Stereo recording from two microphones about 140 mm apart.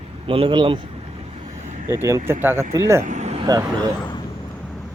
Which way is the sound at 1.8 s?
20° right (ahead or behind).